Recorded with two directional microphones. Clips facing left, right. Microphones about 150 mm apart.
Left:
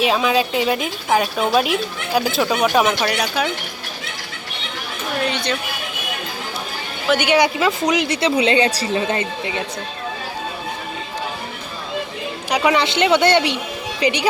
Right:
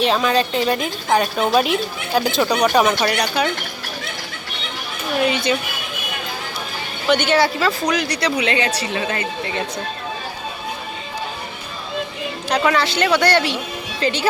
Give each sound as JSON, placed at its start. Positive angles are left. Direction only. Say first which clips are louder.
{"t": 0.0, "sound": "a woman's voice", "louder": "even", "side_deg": 5}
{"t": 5.3, "sound": "speech", "louder": "right 3 dB", "side_deg": -5}
{"t": 7.1, "sound": "a woman's voice", "louder": "even", "side_deg": 10}
{"t": 12.5, "sound": "a woman's voice", "louder": "left 1 dB", "side_deg": 15}